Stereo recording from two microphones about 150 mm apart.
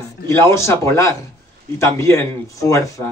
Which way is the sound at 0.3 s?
15° left (ahead or behind).